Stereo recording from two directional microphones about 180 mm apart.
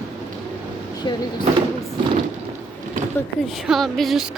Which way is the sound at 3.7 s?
Centre (ahead or behind).